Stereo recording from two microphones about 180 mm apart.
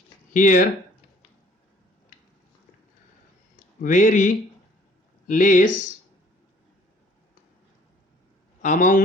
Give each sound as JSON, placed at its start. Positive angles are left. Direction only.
{"t": 0.3, "sound": "speech", "side_deg": 45}
{"t": 3.8, "sound": "speech", "side_deg": 45}
{"t": 5.3, "sound": "speech", "side_deg": 45}
{"t": 8.6, "sound": "speech", "side_deg": 45}